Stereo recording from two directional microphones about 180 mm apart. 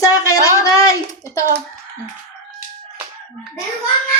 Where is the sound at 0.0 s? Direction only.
20° left (ahead or behind).